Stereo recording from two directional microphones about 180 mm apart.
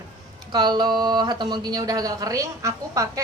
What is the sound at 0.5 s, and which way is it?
Speech, 25° right (ahead or behind).